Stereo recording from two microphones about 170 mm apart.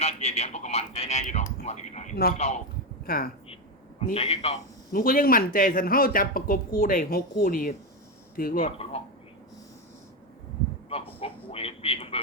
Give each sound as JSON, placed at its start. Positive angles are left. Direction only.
{"t": 0.0, "sound": "speech", "side_deg": 40}
{"t": 3.0, "sound": "speech", "side_deg": 60}
{"t": 4.1, "sound": "speech", "side_deg": 35}
{"t": 4.9, "sound": "speech", "side_deg": 55}
{"t": 8.6, "sound": "speech", "side_deg": 35}
{"t": 11.2, "sound": "a sound", "side_deg": 35}